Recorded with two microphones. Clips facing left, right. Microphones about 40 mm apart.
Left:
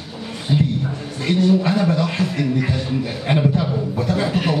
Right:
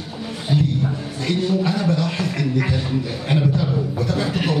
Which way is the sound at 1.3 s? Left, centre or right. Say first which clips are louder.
Left 4 dB; left.